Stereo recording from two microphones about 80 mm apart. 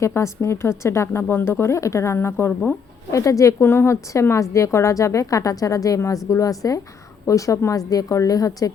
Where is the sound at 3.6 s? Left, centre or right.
Left.